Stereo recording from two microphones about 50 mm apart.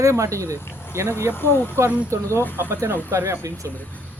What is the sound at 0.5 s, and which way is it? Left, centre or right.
Speech, left.